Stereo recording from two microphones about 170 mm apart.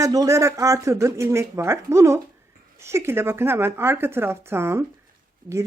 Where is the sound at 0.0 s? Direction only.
20° right (ahead or behind).